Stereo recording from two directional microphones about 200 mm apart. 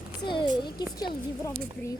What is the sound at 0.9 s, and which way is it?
Speech, 20° left (ahead or behind).